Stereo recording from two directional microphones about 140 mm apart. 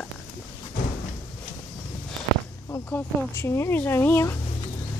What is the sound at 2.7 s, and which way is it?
Speech, 15° left (ahead or behind).